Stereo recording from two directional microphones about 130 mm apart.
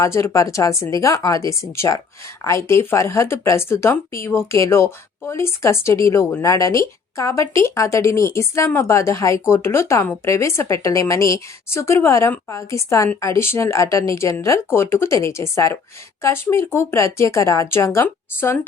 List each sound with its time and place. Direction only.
0.0 s speech: 25° left (ahead or behind)